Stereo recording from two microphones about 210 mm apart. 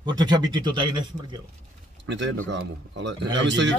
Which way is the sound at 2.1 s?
60° right (ahead or behind).